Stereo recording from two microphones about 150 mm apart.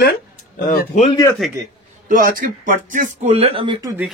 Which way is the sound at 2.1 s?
70° right (ahead or behind).